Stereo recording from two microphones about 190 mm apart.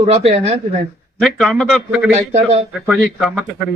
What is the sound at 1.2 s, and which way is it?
Speech, centre (ahead or behind).